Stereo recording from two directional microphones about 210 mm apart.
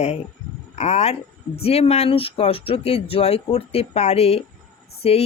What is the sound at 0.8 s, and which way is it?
Speech, 30° left (ahead or behind).